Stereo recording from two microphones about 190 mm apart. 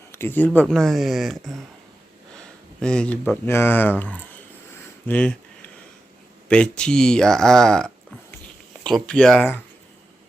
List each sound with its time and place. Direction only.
0.1 s speech: 10° left (ahead or behind)
2.8 s speech: 5° left (ahead or behind)
5.0 s a sound: 5° left (ahead or behind)
6.5 s speech: 5° left (ahead or behind)
9.0 s speech: 5° left (ahead or behind)